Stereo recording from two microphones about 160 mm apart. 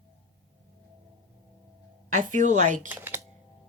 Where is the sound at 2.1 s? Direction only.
50° right (ahead or behind).